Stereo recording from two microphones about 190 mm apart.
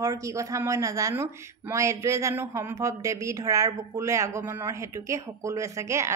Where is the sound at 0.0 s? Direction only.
15° right (ahead or behind).